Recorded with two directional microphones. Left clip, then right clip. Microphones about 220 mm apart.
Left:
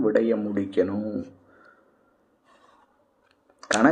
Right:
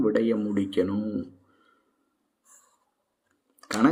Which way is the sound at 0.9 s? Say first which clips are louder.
Left 1 dB; 25° right (ahead or behind).